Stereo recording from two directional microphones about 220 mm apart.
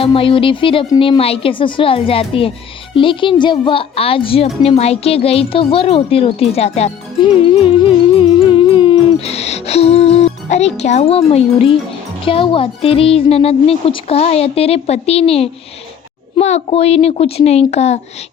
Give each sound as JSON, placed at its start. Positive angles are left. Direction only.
{"t": 0.0, "sound": "speech", "side_deg": 25}
{"t": 7.4, "sound": "music", "side_deg": 25}
{"t": 12.2, "sound": "speech", "side_deg": 25}